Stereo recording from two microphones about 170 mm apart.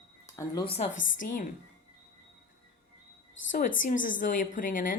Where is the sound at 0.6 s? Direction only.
35° left (ahead or behind).